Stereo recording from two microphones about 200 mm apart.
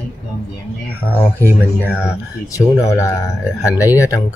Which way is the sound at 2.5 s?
15° left (ahead or behind).